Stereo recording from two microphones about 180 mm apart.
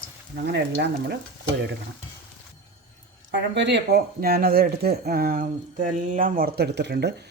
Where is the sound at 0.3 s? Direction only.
65° right (ahead or behind).